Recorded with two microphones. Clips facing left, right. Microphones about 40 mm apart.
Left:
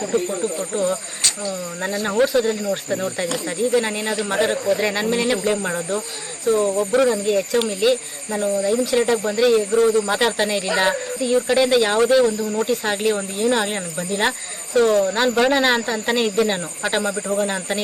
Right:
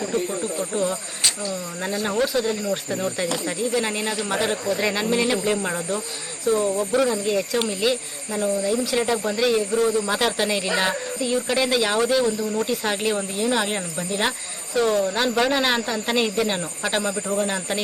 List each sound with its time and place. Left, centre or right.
0.0 s speech: centre